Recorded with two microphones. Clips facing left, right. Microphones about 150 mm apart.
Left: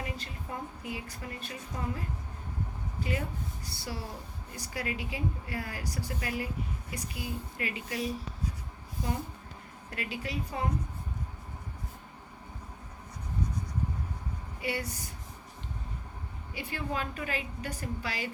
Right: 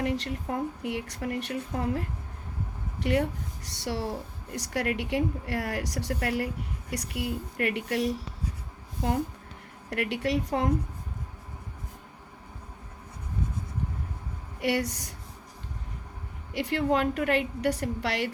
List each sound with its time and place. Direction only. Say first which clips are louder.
0.0 s a woman's voice: right 10 dB; 75° right (ahead or behind)
9.9 s speech: right 9 dB; 75° right (ahead or behind)
14.6 s speech: right 8 dB; 75° right (ahead or behind)
16.6 s speech: right 10 dB; 75° right (ahead or behind)